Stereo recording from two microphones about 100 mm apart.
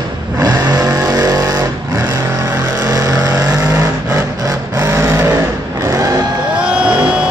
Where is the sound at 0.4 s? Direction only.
40° right (ahead or behind).